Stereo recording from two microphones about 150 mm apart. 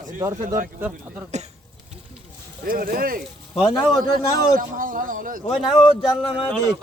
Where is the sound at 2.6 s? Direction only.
75° right (ahead or behind).